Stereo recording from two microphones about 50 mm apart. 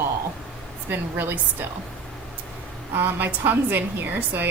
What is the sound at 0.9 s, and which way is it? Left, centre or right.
Speech, right.